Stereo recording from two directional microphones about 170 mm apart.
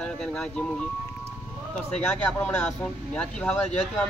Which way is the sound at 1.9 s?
10° left (ahead or behind).